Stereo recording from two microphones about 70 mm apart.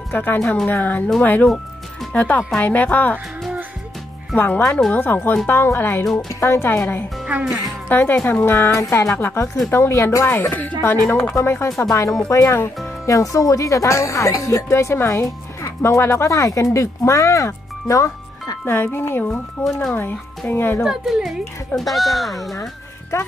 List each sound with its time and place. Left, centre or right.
0.1 s speech: left
0.4 s speech: centre
0.7 s speech: left
4.4 s speech: left
6.8 s speech: left
8.5 s speech: left
9.1 s speech: left
11.3 s speech: left
13.0 s speech: left
18.7 s speech: left
19.6 s speech: centre
20.0 s speech: left
20.8 s speech: centre